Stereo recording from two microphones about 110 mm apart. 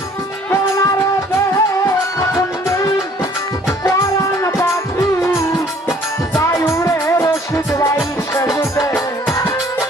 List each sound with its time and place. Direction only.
0.5 s music: 25° left (ahead or behind)